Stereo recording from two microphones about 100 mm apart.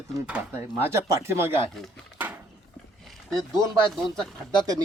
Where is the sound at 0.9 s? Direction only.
25° right (ahead or behind).